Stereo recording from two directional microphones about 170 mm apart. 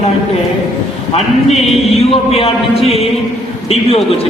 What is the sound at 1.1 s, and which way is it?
Speech, 40° left (ahead or behind).